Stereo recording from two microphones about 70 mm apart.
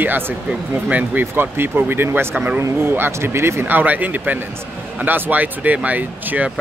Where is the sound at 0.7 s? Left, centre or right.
Right.